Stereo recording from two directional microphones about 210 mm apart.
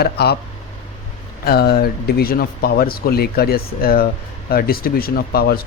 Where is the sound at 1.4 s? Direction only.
50° left (ahead or behind).